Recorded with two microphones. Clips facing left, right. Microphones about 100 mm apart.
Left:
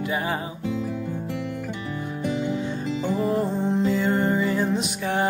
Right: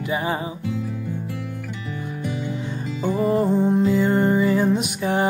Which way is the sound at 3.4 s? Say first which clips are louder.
Right 4 dB; 15° right (ahead or behind).